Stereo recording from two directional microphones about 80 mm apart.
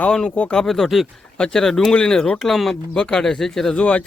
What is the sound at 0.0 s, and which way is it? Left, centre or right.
Speech, centre.